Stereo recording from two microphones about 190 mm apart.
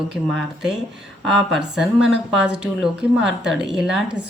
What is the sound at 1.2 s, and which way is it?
A woman's voice, 5° right (ahead or behind).